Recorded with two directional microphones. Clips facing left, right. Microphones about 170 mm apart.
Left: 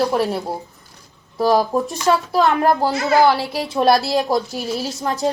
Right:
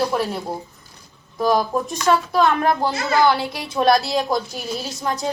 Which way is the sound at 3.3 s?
5° left (ahead or behind).